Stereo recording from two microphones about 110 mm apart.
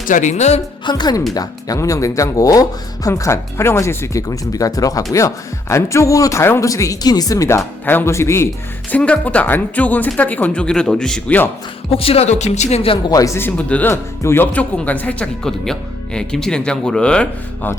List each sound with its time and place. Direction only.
0.3 s speech: 90° left
0.9 s speech: 40° left (ahead or behind); by 8.4 s 25° left (ahead or behind)
8.9 s speech: 10° left (ahead or behind)
11.9 s speech: 60° left (ahead or behind)
13.1 s speech: 30° left (ahead or behind)
13.6 s speech: 10° left (ahead or behind)